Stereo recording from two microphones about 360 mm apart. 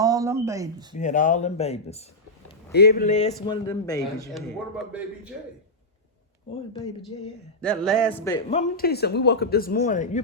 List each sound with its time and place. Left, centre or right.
0.0 s speech: centre
0.9 s a man's voice: left; by 5.3 s centre
7.6 s a man's voice: centre; by 10.2 s left